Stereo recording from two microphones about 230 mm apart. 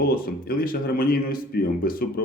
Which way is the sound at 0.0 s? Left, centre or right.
Left.